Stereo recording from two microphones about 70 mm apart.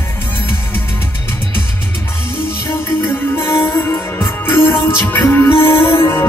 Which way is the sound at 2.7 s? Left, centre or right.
Left.